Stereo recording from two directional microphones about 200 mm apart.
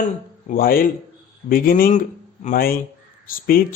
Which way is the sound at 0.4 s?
45° left (ahead or behind).